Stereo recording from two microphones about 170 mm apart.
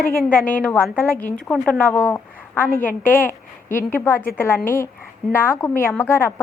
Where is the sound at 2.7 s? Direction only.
50° left (ahead or behind).